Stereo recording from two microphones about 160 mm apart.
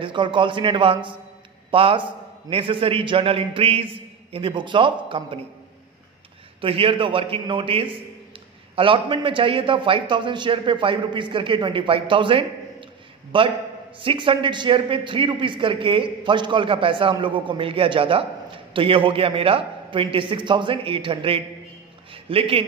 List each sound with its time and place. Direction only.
0.0 s a man's voice: 30° right (ahead or behind)
6.6 s a man's voice: 35° right (ahead or behind)